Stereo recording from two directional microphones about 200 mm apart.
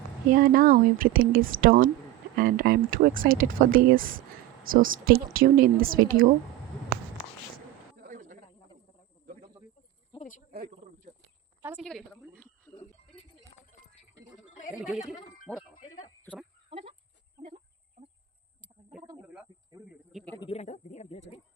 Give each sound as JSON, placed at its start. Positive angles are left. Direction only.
{"t": 0.3, "sound": "speech", "side_deg": -45}
{"t": 7.9, "sound": "a sound", "side_deg": -40}
{"t": 9.2, "sound": "cricket", "side_deg": -45}
{"t": 10.1, "sound": "cricket", "side_deg": 40}
{"t": 10.5, "sound": "snake", "side_deg": -45}
{"t": 11.8, "sound": "a woman's voice", "side_deg": 0}
{"t": 14.8, "sound": "a woman's voice", "side_deg": 0}
{"t": 16.2, "sound": "fowl", "side_deg": 5}
{"t": 16.6, "sound": "chicken", "side_deg": -30}
{"t": 18.0, "sound": "a sound", "side_deg": -35}
{"t": 19.3, "sound": "snake", "side_deg": -5}
{"t": 20.4, "sound": "speech", "side_deg": 30}